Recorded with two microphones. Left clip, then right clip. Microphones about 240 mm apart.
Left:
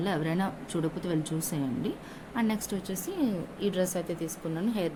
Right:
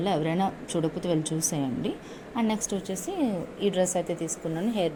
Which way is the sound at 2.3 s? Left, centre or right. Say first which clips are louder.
Right 3 dB; centre.